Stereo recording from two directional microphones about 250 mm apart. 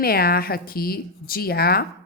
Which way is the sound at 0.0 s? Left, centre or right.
Left.